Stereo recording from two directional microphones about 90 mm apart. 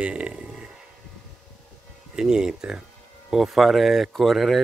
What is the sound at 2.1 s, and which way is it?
Speech, 5° right (ahead or behind).